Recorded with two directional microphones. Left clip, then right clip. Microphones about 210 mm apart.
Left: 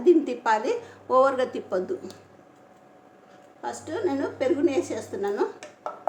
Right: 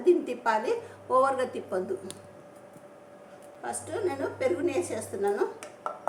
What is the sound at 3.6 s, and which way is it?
A woman's voice, 25° left (ahead or behind).